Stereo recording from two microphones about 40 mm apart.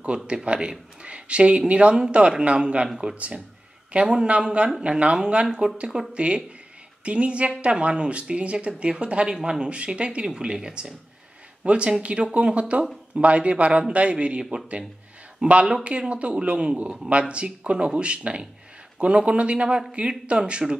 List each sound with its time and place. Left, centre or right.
0.0 s speech: right
3.9 s speech: right
9.7 s speech: right
15.4 s speech: right
15.8 s speech: right